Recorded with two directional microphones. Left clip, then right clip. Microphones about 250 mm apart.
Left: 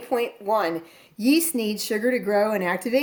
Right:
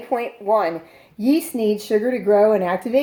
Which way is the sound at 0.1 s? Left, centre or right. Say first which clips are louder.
Right 4 dB; left.